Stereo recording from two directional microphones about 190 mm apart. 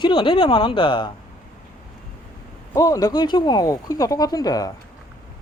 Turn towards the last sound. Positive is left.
turn(degrees=20)  # may be behind; listen again after turning